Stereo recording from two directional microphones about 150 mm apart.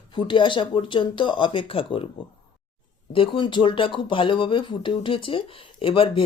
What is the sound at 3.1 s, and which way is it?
Speech, 35° left (ahead or behind).